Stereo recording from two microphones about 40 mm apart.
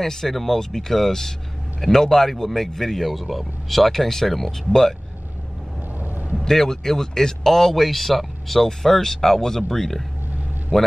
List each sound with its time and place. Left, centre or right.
0.0 s speech: centre
5.9 s a sound: right
6.3 s speech: centre